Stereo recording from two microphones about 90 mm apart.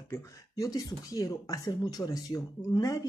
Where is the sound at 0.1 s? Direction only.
35° left (ahead or behind).